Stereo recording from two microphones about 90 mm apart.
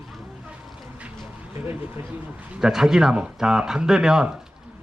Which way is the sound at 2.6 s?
5° right (ahead or behind).